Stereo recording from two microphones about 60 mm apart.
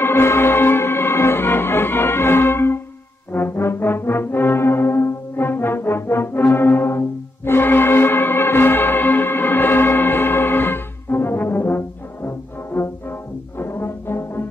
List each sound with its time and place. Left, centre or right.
0.0 s music: left
3.3 s brass instrument: left